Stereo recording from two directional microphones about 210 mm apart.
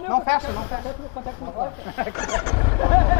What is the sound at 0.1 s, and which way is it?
Speech, 25° left (ahead or behind).